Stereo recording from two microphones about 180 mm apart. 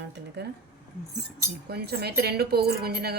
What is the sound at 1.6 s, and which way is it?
Speech, 65° right (ahead or behind).